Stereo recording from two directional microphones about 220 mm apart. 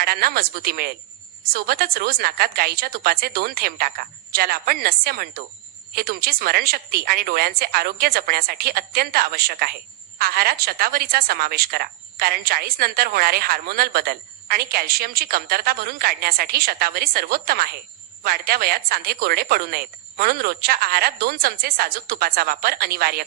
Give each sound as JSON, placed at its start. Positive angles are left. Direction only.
{"t": 0.0, "sound": "a woman's voice", "side_deg": -45}